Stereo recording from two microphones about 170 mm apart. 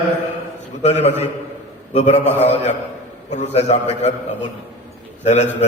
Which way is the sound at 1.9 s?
40° left (ahead or behind).